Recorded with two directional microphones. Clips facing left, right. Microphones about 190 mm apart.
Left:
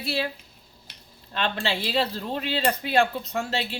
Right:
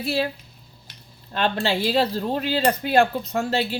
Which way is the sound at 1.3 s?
40° right (ahead or behind).